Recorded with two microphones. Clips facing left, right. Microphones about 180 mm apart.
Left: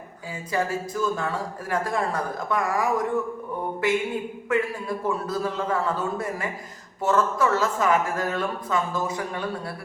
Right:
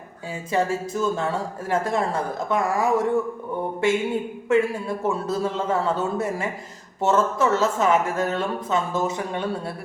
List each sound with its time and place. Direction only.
0.5 s a woman's voice: 25° right (ahead or behind)